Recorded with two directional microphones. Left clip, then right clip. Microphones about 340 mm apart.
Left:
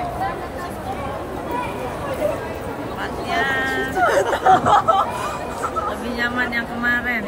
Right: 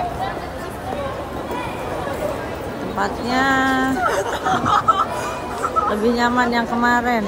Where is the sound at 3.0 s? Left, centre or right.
Centre.